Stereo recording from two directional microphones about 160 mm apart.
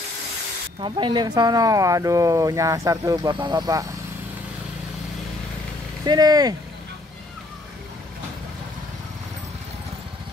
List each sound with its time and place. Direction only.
0.7 s speech: 30° right (ahead or behind)
6.0 s speech: 25° right (ahead or behind)